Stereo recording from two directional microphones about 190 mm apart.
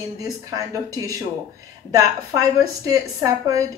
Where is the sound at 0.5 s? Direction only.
20° right (ahead or behind).